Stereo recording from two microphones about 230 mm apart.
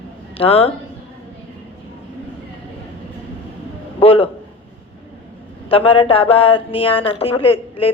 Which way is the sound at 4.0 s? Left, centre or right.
Left.